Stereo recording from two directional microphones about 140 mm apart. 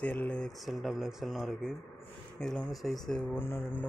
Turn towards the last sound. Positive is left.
turn(degrees=15)  # may be behind; listen again after turning